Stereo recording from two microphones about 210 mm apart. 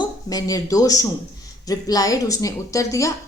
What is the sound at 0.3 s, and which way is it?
A woman's voice, 15° left (ahead or behind).